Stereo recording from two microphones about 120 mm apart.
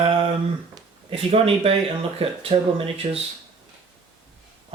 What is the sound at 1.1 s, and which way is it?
Speech, 55° right (ahead or behind).